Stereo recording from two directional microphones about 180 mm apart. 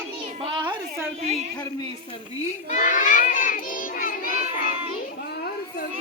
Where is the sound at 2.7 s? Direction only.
40° left (ahead or behind).